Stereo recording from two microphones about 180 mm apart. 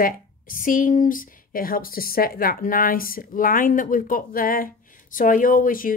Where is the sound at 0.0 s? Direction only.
50° left (ahead or behind).